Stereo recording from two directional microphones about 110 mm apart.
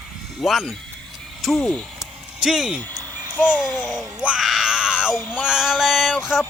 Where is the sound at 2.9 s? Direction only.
30° right (ahead or behind).